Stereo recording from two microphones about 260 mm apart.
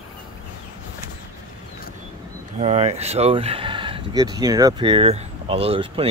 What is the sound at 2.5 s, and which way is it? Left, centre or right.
Speech, right.